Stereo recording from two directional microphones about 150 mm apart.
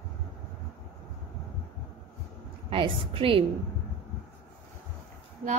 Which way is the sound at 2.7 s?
35° right (ahead or behind).